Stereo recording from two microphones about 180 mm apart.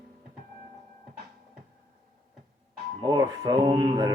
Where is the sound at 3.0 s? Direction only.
20° right (ahead or behind).